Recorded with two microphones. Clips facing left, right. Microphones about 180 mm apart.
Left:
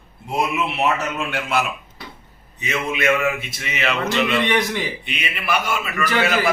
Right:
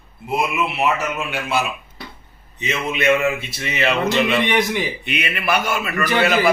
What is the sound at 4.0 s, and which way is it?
Speech, 15° right (ahead or behind).